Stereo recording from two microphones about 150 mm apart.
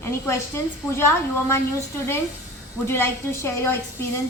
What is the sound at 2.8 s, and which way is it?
A woman's voice, 15° left (ahead or behind).